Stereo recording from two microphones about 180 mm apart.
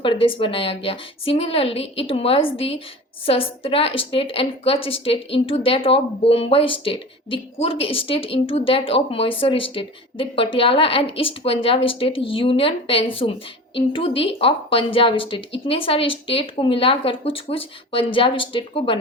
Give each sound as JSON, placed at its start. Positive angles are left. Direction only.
{"t": 0.0, "sound": "a woman's voice", "side_deg": 30}